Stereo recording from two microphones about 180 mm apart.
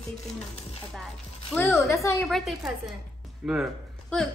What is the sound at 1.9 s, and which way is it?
Speech, 15° left (ahead or behind).